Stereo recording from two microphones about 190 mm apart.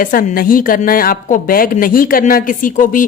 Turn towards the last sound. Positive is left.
turn(degrees=45)  # may be behind; listen again after turning